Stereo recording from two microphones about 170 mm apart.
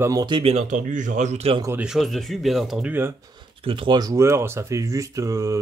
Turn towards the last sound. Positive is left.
turn(degrees=-20)  # may be behind; listen again after turning